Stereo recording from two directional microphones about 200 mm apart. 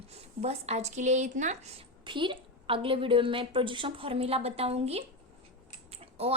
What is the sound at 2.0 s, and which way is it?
Speech, 25° right (ahead or behind).